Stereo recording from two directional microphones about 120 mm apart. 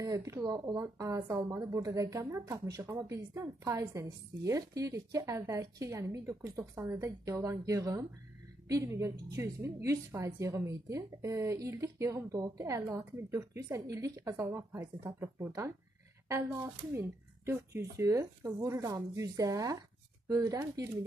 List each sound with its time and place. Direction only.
0.0 s speech: 25° right (ahead or behind)